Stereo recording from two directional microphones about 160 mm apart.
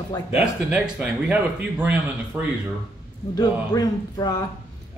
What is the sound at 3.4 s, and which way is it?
A man's voice, 25° left (ahead or behind).